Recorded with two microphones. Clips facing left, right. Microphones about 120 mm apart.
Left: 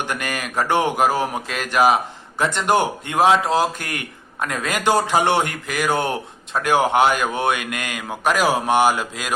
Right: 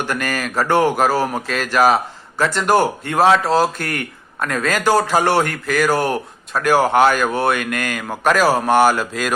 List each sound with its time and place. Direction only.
0.0 s a man's voice: 15° left (ahead or behind)